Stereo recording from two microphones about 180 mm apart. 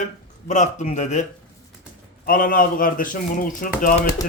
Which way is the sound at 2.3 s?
50° left (ahead or behind).